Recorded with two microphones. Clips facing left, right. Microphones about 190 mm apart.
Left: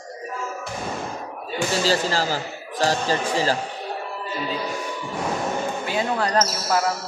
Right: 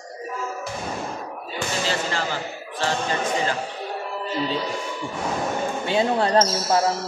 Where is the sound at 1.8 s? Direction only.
35° left (ahead or behind).